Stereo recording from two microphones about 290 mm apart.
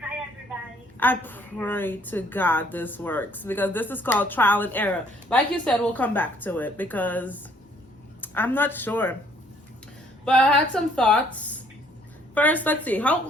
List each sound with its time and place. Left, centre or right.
0.9 s a woman's voice: centre
10.2 s a woman's voice: centre